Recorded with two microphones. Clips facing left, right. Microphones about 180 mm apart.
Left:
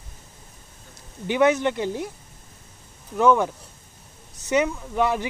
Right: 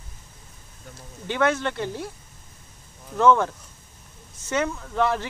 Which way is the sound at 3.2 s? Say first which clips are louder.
Even; 15° left (ahead or behind).